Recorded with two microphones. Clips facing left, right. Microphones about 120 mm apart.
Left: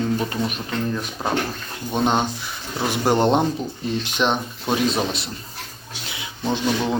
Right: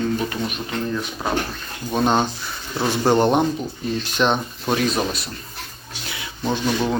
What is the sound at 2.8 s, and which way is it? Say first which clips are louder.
Speech: right 1 dB; 15° left (ahead or behind).